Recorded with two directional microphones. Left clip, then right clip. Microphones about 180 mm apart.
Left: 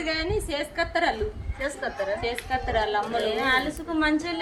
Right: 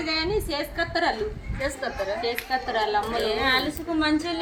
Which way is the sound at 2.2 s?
5° left (ahead or behind).